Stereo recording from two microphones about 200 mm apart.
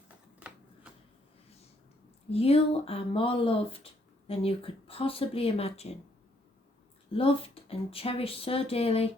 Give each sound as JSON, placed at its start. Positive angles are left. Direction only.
{"t": 0.3, "sound": "shuffling cards", "side_deg": -5}
{"t": 2.3, "sound": "speech", "side_deg": 30}
{"t": 7.1, "sound": "speech", "side_deg": 30}